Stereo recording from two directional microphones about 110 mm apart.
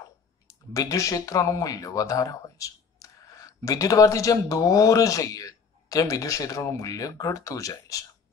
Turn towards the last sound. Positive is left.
turn(degrees=30)  # may be behind; listen again after turning